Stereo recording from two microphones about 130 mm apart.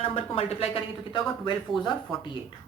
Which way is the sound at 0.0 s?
45° left (ahead or behind).